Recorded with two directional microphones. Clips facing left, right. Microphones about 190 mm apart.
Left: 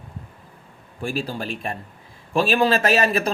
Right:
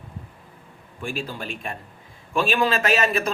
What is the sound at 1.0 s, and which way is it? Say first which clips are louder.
A man's voice: left 4 dB; 35° left (ahead or behind).